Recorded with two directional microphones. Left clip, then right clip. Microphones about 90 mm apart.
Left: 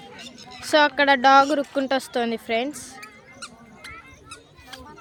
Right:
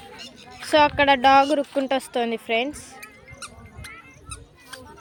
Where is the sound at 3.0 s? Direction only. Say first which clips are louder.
Even; 75° right (ahead or behind).